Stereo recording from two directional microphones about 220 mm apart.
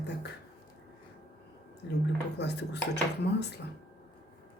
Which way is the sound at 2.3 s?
50° left (ahead or behind).